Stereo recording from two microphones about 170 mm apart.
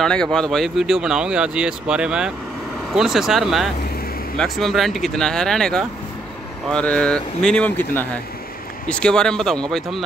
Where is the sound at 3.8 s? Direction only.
60° left (ahead or behind).